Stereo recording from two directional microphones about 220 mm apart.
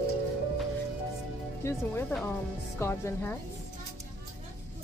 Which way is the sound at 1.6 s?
10° left (ahead or behind).